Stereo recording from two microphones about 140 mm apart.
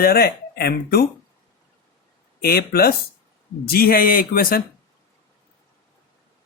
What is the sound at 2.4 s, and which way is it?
Speech, 90° left.